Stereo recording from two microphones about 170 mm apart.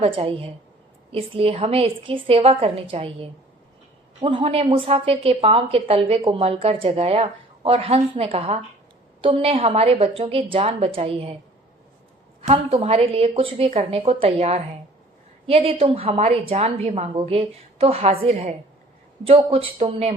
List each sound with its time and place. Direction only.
0.0 s a woman's voice: 35° right (ahead or behind)
12.4 s a woman's voice: 35° right (ahead or behind)